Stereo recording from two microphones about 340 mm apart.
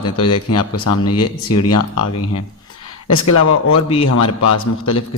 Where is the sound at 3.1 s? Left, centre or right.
Left.